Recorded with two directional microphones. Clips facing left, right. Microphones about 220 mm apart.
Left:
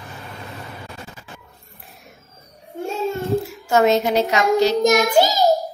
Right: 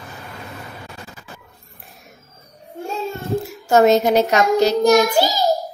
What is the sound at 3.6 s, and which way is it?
A woman's voice, 40° right (ahead or behind).